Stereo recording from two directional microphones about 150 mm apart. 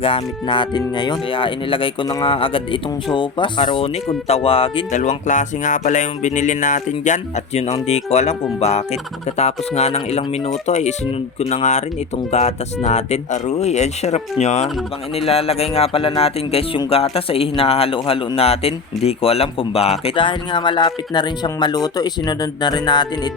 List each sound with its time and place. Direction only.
0.0 s speech: 35° left (ahead or behind)
4.9 s speech: 55° left (ahead or behind); by 23.3 s 30° left (ahead or behind)